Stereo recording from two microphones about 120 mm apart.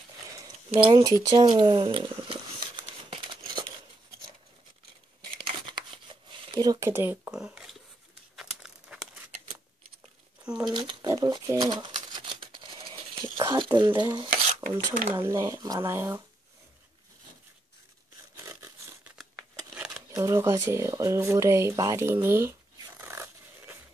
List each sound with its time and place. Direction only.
0.7 s speech: 45° right (ahead or behind)
1.0 s a sound: 35° right (ahead or behind)
5.4 s crumpling: 45° right (ahead or behind)
6.9 s speech: 20° right (ahead or behind)
7.2 s speech: 5° right (ahead or behind)
8.4 s crumpling: 5° right (ahead or behind)
10.4 s speech: 10° right (ahead or behind)
10.7 s speech: 40° right (ahead or behind)
15.0 s speech: 20° right (ahead or behind)
15.9 s speech: 20° right (ahead or behind)
18.5 s a sound: 25° right (ahead or behind)
19.7 s a sound: 5° right (ahead or behind)
20.1 s speech: 30° right (ahead or behind)